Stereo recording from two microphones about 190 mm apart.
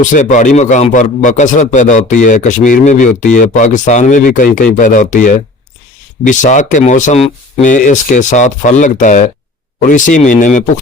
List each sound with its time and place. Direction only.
0.0 s speech: 40° left (ahead or behind)